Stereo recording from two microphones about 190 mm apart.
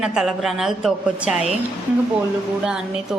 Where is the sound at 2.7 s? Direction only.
5° right (ahead or behind).